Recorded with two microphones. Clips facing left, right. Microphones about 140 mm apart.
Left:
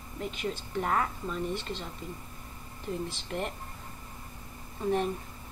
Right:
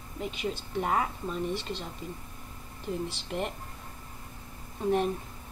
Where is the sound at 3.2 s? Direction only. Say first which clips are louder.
Right 1 dB; 5° right (ahead or behind).